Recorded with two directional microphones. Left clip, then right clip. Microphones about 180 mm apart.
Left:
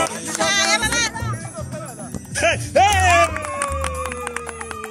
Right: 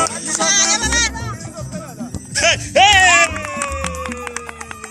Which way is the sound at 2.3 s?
40° left (ahead or behind).